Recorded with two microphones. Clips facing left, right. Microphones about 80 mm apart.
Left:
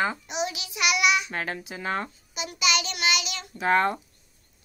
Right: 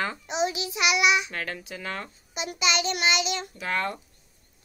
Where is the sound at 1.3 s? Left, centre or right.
Left.